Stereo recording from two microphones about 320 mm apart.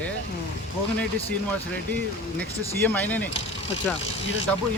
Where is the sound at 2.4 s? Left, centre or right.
Centre.